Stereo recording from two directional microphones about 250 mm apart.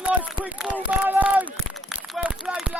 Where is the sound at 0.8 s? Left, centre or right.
Centre.